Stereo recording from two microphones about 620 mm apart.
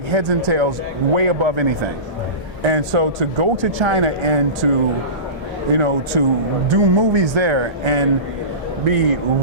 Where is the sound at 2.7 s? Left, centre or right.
Right.